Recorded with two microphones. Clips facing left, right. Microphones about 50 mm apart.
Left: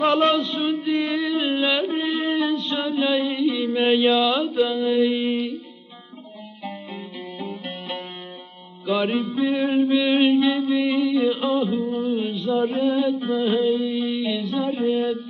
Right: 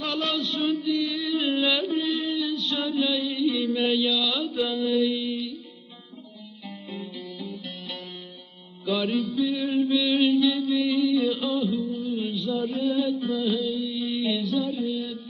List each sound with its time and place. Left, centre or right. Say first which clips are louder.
0.0 s male singing: left 9 dB; left
0.9 s a sound: left 4 dB; left
6.7 s music: left 3 dB; left
8.9 s mantra: left 3 dB; left